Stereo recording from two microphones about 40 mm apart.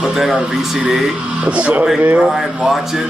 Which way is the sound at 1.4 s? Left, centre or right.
Right.